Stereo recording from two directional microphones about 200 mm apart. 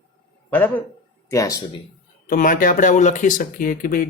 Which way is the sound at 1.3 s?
15° left (ahead or behind).